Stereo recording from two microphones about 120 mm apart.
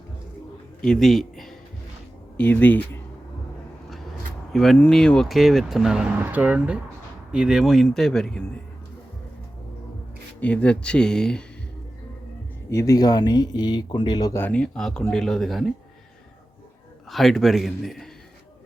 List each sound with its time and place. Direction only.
0.8 s a sound: 5° left (ahead or behind)
2.4 s speech: 15° left (ahead or behind)
4.5 s speech: centre (ahead or behind)
10.4 s speech: 10° left (ahead or behind)
12.7 s speech: 30° left (ahead or behind)
14.3 s speech: 10° left (ahead or behind)
17.1 s speech: centre (ahead or behind)